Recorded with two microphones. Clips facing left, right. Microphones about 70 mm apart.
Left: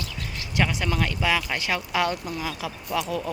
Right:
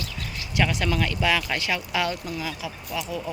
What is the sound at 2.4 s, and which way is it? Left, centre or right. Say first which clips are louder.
Speech: left 1 dB; left.